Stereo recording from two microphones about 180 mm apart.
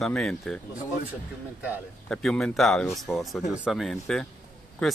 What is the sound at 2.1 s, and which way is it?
Speech, 5° left (ahead or behind).